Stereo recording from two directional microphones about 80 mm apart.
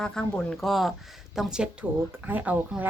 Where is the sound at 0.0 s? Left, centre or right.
Centre.